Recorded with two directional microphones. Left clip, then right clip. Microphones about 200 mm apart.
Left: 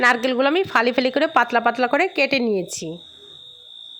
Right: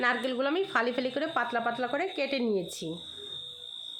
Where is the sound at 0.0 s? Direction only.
45° left (ahead or behind).